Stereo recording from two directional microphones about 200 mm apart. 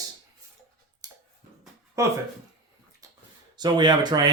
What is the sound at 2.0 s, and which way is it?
Speech, 15° right (ahead or behind).